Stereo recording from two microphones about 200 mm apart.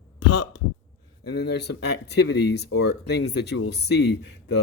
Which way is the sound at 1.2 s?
55° left (ahead or behind).